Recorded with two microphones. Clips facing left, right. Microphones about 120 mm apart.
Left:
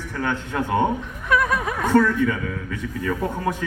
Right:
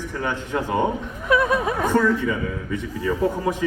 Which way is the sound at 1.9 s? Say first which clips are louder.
Left 3 dB; 10° right (ahead or behind).